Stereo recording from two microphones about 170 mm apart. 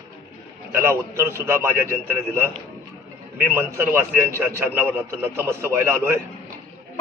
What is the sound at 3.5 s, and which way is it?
A man's voice, 15° right (ahead or behind).